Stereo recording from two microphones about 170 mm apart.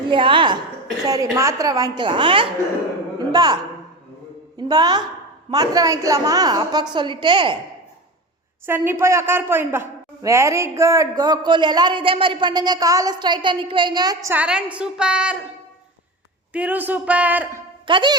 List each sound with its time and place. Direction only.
0.1 s a woman's voice: 30° right (ahead or behind)
8.6 s a woman's voice: 15° right (ahead or behind)
14.3 s speech: 5° right (ahead or behind)
16.5 s speech: 10° right (ahead or behind)
17.8 s speech: 30° right (ahead or behind)